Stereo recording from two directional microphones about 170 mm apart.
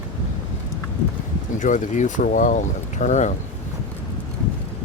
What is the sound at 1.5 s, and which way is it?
Speech, 50° left (ahead or behind).